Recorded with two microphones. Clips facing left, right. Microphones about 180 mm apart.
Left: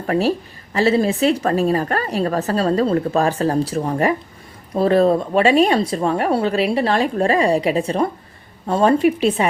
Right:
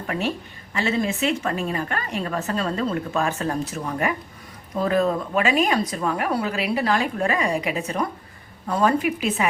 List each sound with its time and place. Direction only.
0.1 s a woman's voice: 35° left (ahead or behind)